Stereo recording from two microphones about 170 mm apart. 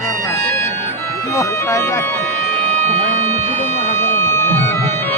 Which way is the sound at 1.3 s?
15° left (ahead or behind).